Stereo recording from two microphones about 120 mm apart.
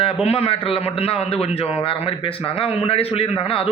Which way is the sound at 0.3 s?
55° left (ahead or behind).